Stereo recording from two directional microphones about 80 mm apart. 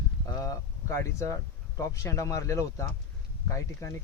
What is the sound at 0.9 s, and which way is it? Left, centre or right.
Speech, left.